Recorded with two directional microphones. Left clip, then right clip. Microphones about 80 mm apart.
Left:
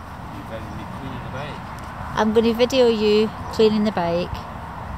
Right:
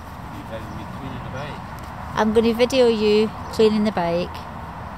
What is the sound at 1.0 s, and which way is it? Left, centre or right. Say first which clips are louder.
Vehicle: even; centre.